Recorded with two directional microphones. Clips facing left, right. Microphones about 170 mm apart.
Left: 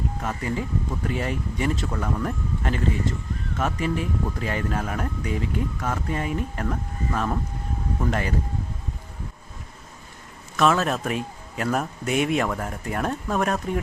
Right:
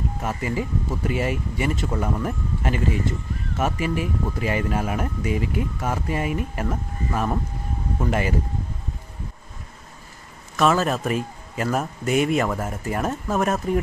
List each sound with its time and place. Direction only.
0.2 s speech: 5° right (ahead or behind)
10.6 s a man's voice: centre (ahead or behind)